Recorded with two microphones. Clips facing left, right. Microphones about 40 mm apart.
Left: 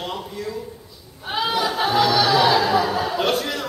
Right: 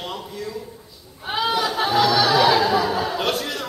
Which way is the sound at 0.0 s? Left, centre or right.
Centre.